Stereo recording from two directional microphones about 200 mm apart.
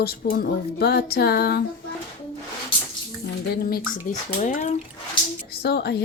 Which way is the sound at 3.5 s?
50° left (ahead or behind).